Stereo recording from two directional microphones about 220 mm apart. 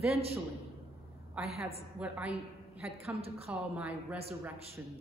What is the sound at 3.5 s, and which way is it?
Speech, 5° right (ahead or behind).